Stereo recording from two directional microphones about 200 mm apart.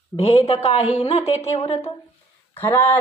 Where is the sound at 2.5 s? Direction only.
10° left (ahead or behind).